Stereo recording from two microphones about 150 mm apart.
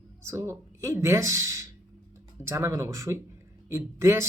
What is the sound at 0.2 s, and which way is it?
Speech, 20° right (ahead or behind).